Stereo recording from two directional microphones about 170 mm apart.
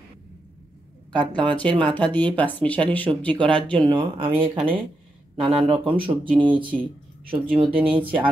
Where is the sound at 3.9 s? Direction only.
30° right (ahead or behind).